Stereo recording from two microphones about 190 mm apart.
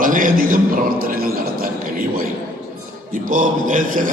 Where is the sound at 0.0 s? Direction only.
45° right (ahead or behind).